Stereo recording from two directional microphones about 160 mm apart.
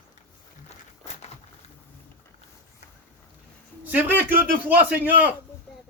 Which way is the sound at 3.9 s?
10° right (ahead or behind).